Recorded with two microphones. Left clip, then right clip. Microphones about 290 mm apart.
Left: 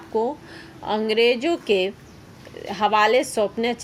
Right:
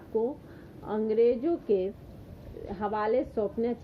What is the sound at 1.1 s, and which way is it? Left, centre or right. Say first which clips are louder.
A woman's voice: left 5 dB; centre.